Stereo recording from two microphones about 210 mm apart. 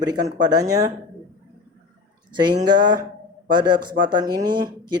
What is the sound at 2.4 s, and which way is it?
Speech, 20° right (ahead or behind).